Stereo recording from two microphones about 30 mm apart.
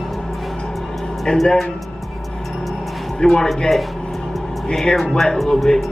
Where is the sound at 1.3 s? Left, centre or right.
Left.